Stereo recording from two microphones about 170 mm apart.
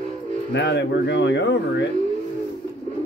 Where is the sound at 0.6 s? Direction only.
90° left.